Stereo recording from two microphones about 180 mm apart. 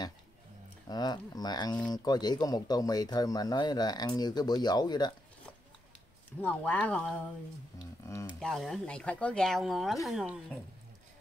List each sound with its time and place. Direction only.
0.8 s speech: 20° left (ahead or behind)
6.4 s speech: 10° left (ahead or behind)
8.4 s speech: centre (ahead or behind)